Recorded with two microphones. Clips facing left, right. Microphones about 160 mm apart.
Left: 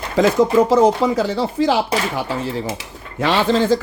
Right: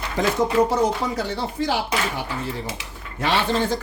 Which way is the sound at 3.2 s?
90° left.